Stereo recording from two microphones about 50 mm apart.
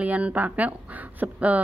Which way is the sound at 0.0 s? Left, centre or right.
Right.